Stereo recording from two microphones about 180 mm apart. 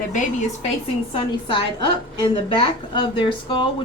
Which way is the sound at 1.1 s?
25° left (ahead or behind).